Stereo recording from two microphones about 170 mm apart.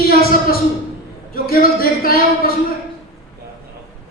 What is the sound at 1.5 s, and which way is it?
Speech, 60° left (ahead or behind).